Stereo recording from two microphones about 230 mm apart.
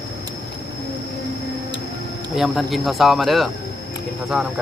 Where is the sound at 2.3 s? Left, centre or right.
Centre.